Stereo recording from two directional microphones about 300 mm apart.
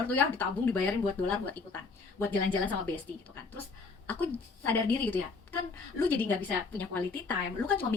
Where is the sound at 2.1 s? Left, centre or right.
Centre.